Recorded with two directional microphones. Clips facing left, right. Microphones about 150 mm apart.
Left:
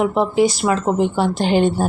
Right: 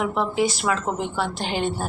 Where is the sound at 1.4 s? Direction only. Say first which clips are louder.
Left 12 dB; 50° left (ahead or behind).